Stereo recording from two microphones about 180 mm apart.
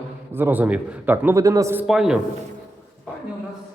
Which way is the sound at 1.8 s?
Centre (ahead or behind).